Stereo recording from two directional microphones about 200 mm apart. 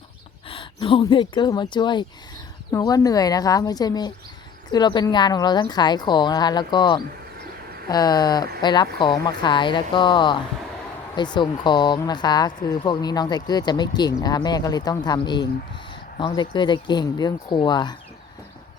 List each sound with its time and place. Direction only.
0.4 s speech: 25° left (ahead or behind)